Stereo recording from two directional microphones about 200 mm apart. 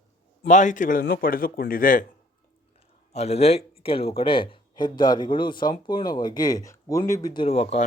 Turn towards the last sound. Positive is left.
turn(degrees=30)  # may be behind; listen again after turning